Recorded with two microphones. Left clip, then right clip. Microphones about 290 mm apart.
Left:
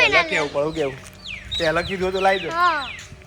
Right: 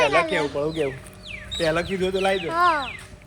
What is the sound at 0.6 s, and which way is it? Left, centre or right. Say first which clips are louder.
Speech: left 2 dB; left.